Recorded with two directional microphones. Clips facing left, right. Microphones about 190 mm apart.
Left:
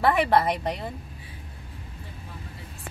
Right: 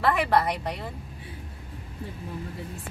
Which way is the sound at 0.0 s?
25° left (ahead or behind).